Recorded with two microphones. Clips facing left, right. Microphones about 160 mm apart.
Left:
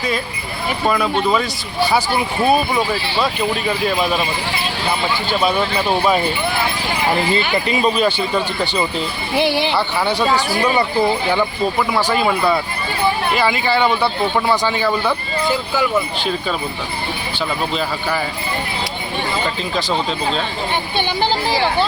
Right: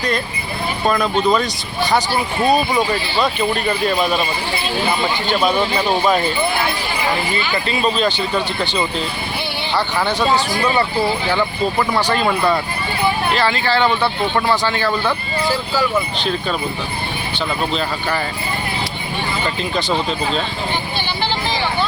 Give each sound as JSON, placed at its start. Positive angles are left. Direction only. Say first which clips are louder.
{"t": 0.9, "sound": "speech", "louder": "right 1 dB", "side_deg": 5}
{"t": 2.5, "sound": "speech", "louder": "right 1 dB", "side_deg": 5}
{"t": 5.3, "sound": "speech", "louder": "right 1 dB", "side_deg": 5}
{"t": 7.5, "sound": "speech", "louder": "left 2 dB", "side_deg": 10}
{"t": 9.3, "sound": "speech", "louder": "left 8 dB", "side_deg": 90}
{"t": 9.7, "sound": "speech", "louder": "even", "side_deg": 10}